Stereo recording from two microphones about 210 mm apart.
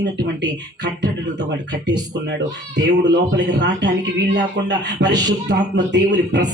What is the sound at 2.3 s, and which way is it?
Speech, 55° right (ahead or behind).